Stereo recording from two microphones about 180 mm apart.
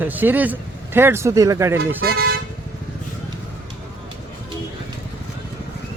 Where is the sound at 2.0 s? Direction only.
60° right (ahead or behind).